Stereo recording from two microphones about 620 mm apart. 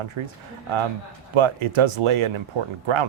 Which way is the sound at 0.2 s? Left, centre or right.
Right.